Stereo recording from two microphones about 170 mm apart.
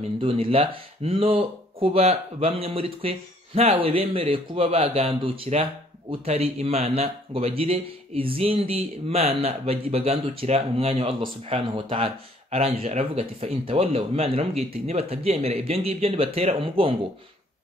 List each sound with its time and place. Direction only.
0.2 s speech: 35° right (ahead or behind)